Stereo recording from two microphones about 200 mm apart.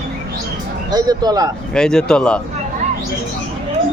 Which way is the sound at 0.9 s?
20° right (ahead or behind).